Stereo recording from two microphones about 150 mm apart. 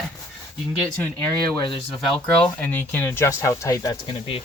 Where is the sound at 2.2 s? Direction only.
10° left (ahead or behind).